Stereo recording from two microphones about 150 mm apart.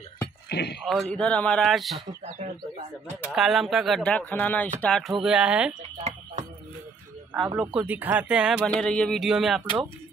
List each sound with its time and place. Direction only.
0.5 s speech: 90° left
0.8 s speech: 5° left (ahead or behind)
3.3 s speech: centre (ahead or behind)
5.8 s a sound: 45° right (ahead or behind)
7.5 s speech: 10° right (ahead or behind)
8.6 s speech: 5° left (ahead or behind)